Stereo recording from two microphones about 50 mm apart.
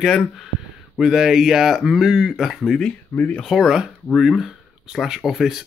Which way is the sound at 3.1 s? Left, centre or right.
Left.